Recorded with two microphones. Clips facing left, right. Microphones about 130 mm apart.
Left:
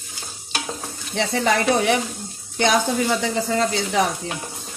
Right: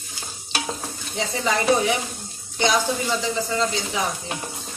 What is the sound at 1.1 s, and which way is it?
Speech, 75° left (ahead or behind).